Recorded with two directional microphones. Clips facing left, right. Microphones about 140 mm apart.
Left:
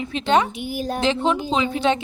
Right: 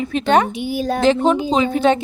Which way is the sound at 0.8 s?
90° right.